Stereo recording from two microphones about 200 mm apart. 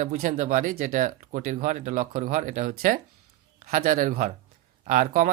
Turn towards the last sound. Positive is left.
turn(degrees=-40)  # may be behind; listen again after turning